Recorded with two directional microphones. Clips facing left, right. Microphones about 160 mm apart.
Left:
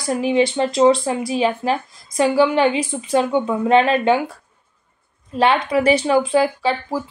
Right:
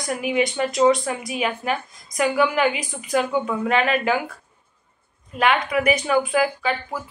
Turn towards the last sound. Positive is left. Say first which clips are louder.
# left 5 dB
turn(degrees=30)  # may be behind; listen again after turning